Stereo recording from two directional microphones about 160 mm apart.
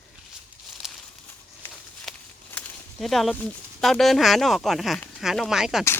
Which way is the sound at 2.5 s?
5° left (ahead or behind).